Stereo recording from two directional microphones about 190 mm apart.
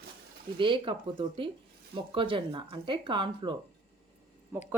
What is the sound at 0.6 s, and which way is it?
Speech, 25° right (ahead or behind).